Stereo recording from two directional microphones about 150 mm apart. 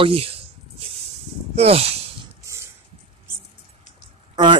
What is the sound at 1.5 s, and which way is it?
Speech, 45° right (ahead or behind).